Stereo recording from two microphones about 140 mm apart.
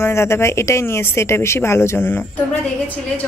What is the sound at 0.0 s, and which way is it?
A woman's voice, 20° left (ahead or behind).